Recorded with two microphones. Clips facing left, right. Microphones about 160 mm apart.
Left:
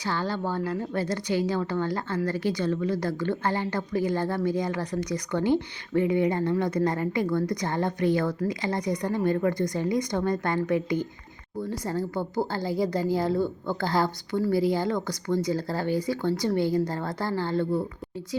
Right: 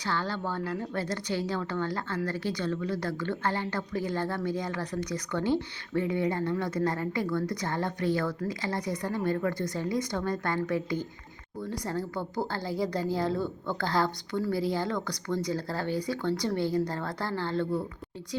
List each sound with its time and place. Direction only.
0.0 s speech: 15° left (ahead or behind)